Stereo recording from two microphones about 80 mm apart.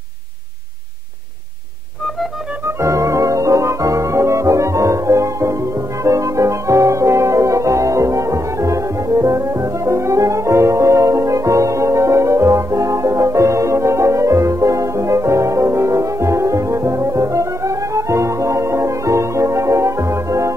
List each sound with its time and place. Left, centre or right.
2.8 s music: right